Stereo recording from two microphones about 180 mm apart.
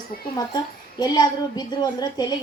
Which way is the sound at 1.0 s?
20° left (ahead or behind).